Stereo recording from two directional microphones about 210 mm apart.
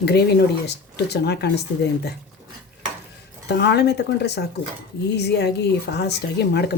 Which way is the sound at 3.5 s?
55° left (ahead or behind).